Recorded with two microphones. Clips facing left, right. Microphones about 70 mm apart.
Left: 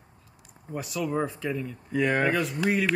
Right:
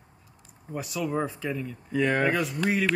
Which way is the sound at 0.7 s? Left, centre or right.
Centre.